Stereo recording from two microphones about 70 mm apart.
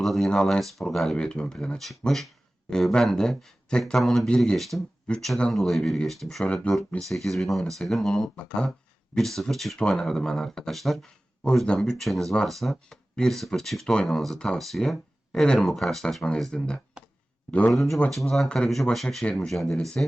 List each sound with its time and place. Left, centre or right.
0.0 s speech: centre
1.1 s speech: centre
6.4 s speech: centre
7.1 s speech: centre
8.4 s speech: centre
18.4 s speech: centre
18.7 s speech: centre